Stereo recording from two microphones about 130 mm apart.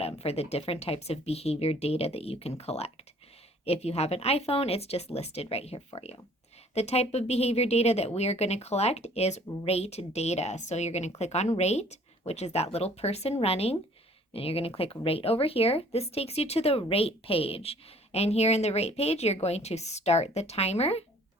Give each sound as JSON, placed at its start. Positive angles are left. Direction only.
{"t": 0.0, "sound": "a woman's voice", "side_deg": 50}